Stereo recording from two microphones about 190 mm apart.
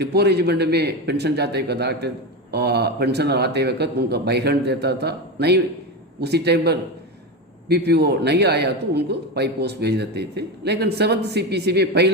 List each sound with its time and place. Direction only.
0.0 s speech: 60° right (ahead or behind)
7.9 s speech: 60° right (ahead or behind)